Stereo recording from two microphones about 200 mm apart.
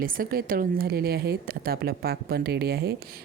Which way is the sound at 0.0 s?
45° right (ahead or behind).